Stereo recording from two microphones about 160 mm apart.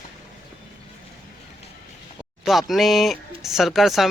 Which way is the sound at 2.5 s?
Centre (ahead or behind).